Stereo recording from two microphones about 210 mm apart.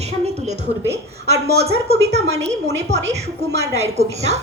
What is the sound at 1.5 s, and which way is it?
Speech, 30° right (ahead or behind).